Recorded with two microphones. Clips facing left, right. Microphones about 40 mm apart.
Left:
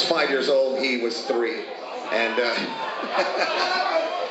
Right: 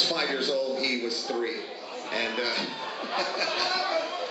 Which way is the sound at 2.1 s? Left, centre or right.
Centre.